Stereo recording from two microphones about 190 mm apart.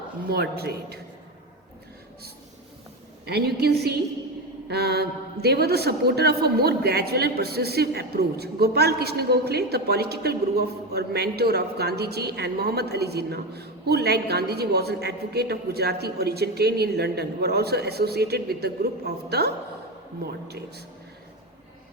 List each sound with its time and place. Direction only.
0.3 s a woman's voice: 55° right (ahead or behind)
3.2 s a woman's voice: 60° right (ahead or behind)